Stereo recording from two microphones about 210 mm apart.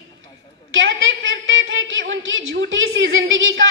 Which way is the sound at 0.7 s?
65° right (ahead or behind).